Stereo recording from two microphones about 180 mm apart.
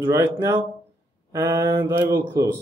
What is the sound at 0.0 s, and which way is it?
Speech, 15° right (ahead or behind).